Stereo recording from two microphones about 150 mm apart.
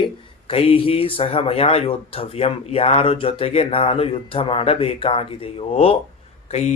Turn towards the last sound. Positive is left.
turn(degrees=50)  # may be behind; listen again after turning